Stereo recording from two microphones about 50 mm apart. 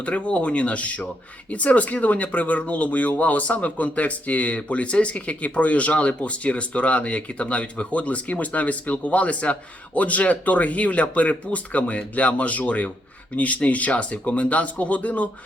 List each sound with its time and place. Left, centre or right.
0.0 s speech: left